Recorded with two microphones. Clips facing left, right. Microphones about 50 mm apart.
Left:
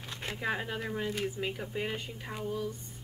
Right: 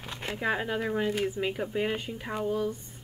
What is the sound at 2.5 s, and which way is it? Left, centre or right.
Speech, right.